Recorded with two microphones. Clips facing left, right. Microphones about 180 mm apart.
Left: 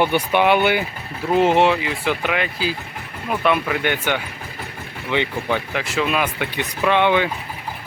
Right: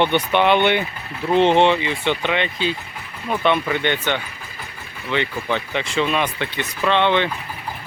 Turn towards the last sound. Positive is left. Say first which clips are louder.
# left 1 dB
turn(degrees=10)  # may be behind; listen again after turning